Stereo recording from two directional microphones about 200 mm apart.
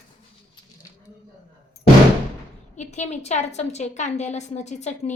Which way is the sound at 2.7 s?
35° left (ahead or behind).